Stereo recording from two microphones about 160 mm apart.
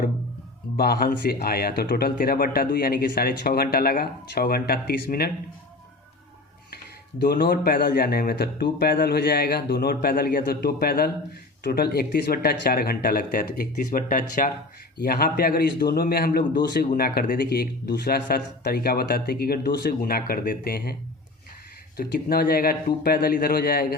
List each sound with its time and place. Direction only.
0.8 s speech: 70° left (ahead or behind)
7.2 s speech: 70° left (ahead or behind)
14.9 s speech: 70° left (ahead or behind)
21.9 s speech: 70° left (ahead or behind)